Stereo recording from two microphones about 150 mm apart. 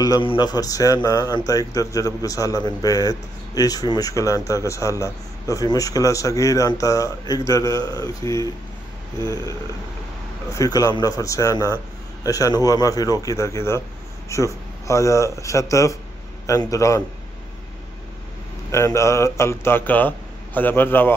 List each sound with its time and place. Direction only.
0.0 s a man's voice: 30° left (ahead or behind)
10.5 s a man's voice: 20° left (ahead or behind)
18.7 s speech: 20° left (ahead or behind)